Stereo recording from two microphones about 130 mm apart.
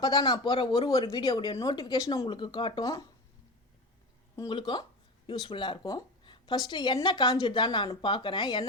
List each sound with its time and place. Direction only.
0.0 s speech: 35° left (ahead or behind)
2.8 s speech: 25° left (ahead or behind)
4.4 s speech: 35° left (ahead or behind)